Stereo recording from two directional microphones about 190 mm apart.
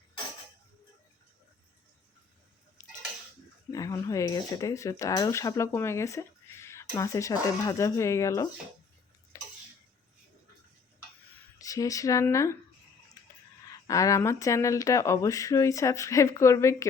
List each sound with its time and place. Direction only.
3.7 s speech: 20° left (ahead or behind)
9.3 s a sound: 15° left (ahead or behind)
11.6 s speech: 20° left (ahead or behind)
13.7 s speech: 15° left (ahead or behind)